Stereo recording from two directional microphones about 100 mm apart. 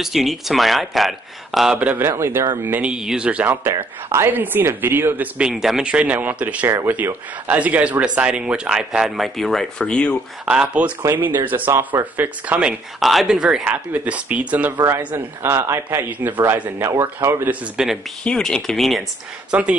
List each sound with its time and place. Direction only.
0.0 s speech: centre (ahead or behind)
1.8 s speech: 20° right (ahead or behind)
2.9 s speech: 5° right (ahead or behind)
3.7 s speech: 30° right (ahead or behind)
5.5 s speech: 5° right (ahead or behind)
10.4 s speech: 10° right (ahead or behind)
13.0 s speech: centre (ahead or behind)
13.7 s speech: 15° right (ahead or behind)
17.8 s speech: 5° right (ahead or behind)
18.2 s speech: 5° left (ahead or behind)
19.5 s speech: 15° right (ahead or behind)